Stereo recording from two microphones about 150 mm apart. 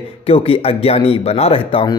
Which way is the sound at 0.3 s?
40° left (ahead or behind).